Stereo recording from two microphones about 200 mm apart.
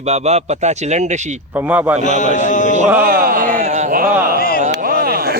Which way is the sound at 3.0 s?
45° right (ahead or behind).